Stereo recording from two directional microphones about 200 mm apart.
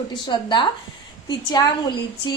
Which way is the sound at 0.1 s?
20° left (ahead or behind).